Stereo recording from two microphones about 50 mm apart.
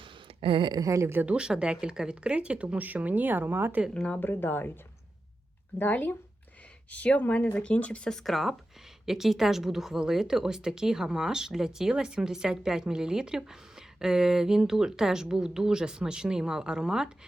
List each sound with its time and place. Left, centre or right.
0.9 s speech: right
1.3 s speech: centre; by 3.8 s right
4.2 s speech: left
5.8 s speech: left
8.1 s speech: centre